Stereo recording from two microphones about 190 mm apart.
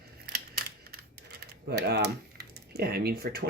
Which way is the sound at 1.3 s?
55° right (ahead or behind).